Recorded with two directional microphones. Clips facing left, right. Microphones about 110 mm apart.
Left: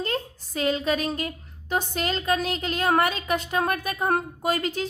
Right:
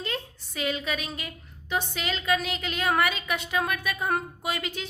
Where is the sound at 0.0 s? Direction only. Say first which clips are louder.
Left 5 dB; 40° left (ahead or behind).